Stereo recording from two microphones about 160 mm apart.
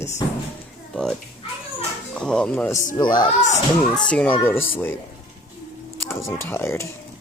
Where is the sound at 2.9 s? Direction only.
25° left (ahead or behind).